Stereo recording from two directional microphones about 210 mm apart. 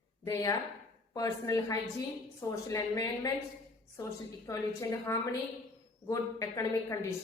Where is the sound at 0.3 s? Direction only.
15° left (ahead or behind).